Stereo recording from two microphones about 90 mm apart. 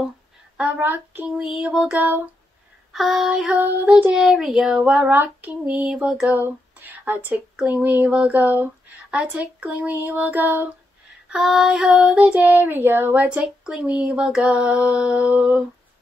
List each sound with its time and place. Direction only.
0.6 s speech: 20° right (ahead or behind)
1.3 s a sound: 5° right (ahead or behind)
1.7 s speech: 15° right (ahead or behind)
2.9 s a sound: centre (ahead or behind)
3.6 s speech: 15° right (ahead or behind)
6.4 s speech: 20° right (ahead or behind)
11.2 s speech: 5° right (ahead or behind)
13.7 s speech: 5° right (ahead or behind)